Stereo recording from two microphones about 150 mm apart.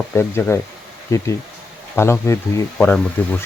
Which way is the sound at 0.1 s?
15° left (ahead or behind).